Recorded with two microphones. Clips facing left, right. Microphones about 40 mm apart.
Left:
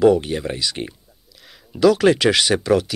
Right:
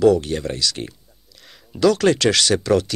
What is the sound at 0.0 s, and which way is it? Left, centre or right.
Speech, centre.